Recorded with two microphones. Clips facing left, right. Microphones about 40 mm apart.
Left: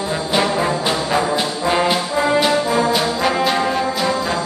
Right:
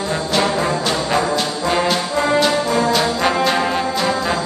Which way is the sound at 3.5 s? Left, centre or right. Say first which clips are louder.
Even; centre.